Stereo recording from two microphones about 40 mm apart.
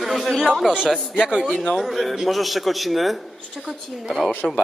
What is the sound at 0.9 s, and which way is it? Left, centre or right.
A woman's voice, centre.